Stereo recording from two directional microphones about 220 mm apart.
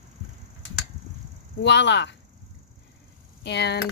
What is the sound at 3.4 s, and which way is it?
Speech, 50° left (ahead or behind).